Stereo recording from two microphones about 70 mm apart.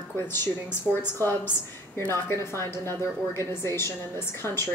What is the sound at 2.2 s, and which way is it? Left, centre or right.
A woman's voice, left.